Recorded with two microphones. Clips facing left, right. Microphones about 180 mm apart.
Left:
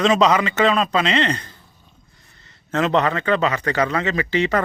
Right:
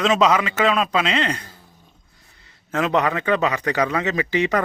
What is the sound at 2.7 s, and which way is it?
Speech, 10° right (ahead or behind).